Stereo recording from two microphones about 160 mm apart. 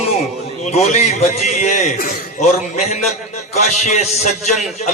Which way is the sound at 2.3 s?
45° left (ahead or behind).